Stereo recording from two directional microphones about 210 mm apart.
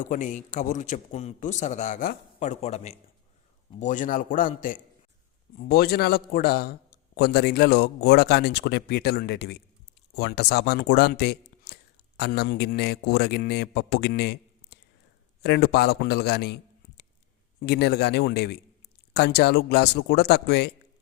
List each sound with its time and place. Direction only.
0.0 s a man's voice: 35° left (ahead or behind)
17.6 s speech: 50° left (ahead or behind)